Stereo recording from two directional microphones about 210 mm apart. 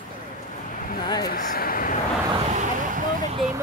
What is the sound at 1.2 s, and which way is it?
Speech, 45° left (ahead or behind).